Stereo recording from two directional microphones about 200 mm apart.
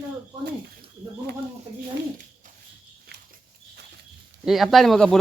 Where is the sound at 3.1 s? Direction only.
55° right (ahead or behind).